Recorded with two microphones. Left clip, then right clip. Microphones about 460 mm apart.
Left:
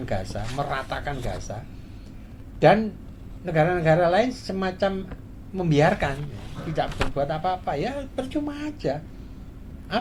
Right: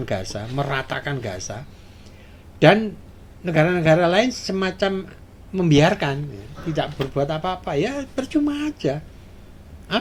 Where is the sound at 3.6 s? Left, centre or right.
Right.